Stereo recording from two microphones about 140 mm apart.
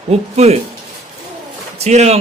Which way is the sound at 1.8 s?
50° right (ahead or behind).